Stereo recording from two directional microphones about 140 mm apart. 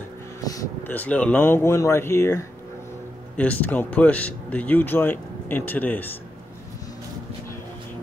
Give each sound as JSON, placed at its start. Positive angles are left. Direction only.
{"t": 0.4, "sound": "vehicle", "side_deg": 25}
{"t": 0.8, "sound": "speech", "side_deg": 10}